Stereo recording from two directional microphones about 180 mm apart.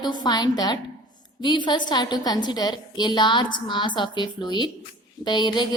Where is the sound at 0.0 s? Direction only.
25° left (ahead or behind).